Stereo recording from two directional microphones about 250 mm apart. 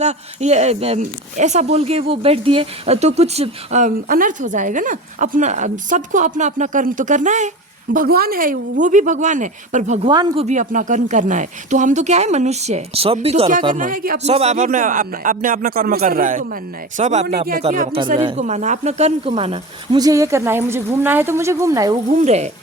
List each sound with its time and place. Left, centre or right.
0.0 s a man's voice: right
13.7 s a man's voice: right; by 21.9 s centre
22.1 s speech: right